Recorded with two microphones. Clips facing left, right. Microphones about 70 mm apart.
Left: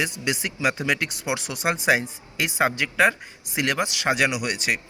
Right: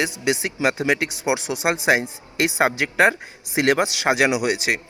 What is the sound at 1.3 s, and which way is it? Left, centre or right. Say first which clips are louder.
Speech: right 6 dB; right.